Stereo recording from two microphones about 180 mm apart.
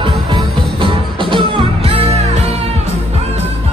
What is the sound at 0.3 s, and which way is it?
Music, 25° right (ahead or behind).